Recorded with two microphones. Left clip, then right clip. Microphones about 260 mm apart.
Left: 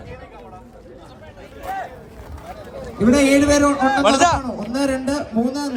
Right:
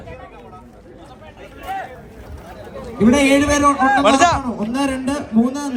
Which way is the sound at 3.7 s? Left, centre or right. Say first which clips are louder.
Right 3 dB; right.